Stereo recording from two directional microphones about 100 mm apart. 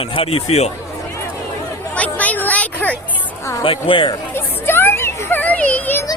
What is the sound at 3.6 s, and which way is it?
Speech, 60° left (ahead or behind).